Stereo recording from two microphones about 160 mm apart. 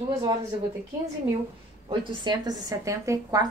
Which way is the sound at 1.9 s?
30° right (ahead or behind).